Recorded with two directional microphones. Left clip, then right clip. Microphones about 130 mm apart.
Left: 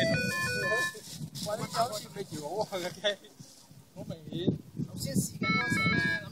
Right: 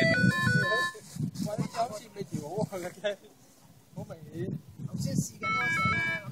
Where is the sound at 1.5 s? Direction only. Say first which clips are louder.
Left 2 dB; 90° right.